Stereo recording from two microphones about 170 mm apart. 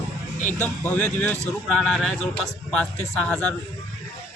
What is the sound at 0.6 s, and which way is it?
A man's voice, 10° left (ahead or behind).